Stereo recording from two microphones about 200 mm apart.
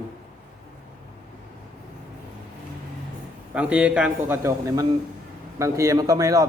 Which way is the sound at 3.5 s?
5° right (ahead or behind).